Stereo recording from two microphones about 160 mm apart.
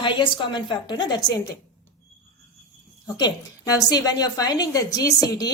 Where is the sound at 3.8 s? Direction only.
25° left (ahead or behind).